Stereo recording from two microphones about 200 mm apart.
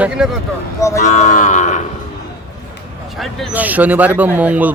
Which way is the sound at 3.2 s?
10° right (ahead or behind).